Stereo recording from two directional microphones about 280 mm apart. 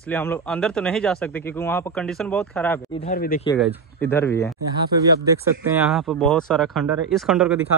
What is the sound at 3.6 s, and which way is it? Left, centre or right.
Speech, centre.